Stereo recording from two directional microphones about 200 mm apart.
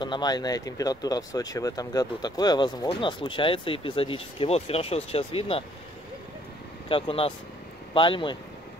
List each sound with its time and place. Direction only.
0.0 s speech: 20° left (ahead or behind)
6.9 s speech: 30° left (ahead or behind)